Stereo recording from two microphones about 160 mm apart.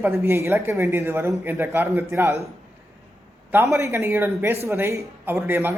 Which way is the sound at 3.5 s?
20° right (ahead or behind).